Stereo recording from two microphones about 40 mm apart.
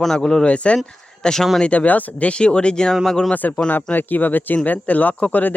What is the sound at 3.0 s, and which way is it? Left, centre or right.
Speech, centre.